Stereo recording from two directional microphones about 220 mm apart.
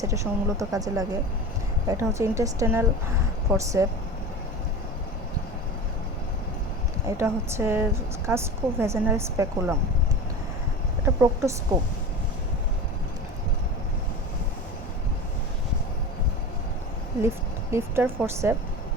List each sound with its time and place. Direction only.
0.0 s a woman's voice: 15° right (ahead or behind)
7.2 s a woman's voice: 10° right (ahead or behind)
11.0 s a woman's voice: 15° right (ahead or behind)
17.2 s a woman's voice: 10° right (ahead or behind)